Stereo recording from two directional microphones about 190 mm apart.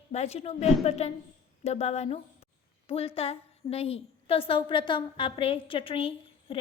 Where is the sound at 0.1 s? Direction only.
35° left (ahead or behind).